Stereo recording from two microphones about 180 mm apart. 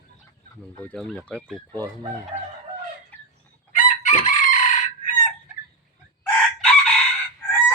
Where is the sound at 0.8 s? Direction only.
5° left (ahead or behind).